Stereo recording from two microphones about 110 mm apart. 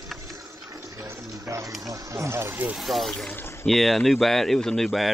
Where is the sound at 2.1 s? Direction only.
25° right (ahead or behind).